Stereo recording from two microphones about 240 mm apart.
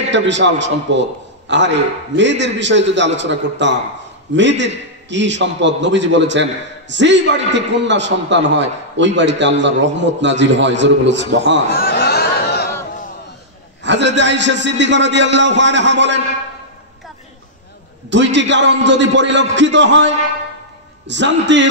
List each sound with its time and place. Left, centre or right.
0.1 s a man's voice: right
11.7 s a sound: left
13.8 s a man's voice: right
18.1 s a man's voice: right
21.1 s a man's voice: right